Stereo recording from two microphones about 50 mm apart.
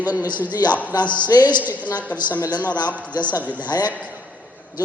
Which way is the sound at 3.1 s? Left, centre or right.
Right.